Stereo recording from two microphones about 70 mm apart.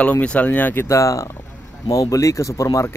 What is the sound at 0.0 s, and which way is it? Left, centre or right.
Speech, centre.